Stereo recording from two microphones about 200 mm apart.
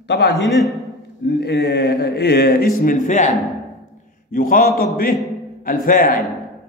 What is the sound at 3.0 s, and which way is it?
Speech, 35° left (ahead or behind).